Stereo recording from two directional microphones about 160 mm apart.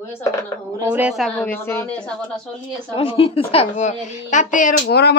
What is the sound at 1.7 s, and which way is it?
Speech, 10° left (ahead or behind).